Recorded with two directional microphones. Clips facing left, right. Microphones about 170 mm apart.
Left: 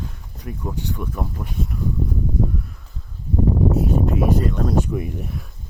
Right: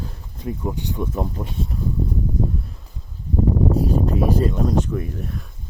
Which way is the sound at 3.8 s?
35° right (ahead or behind).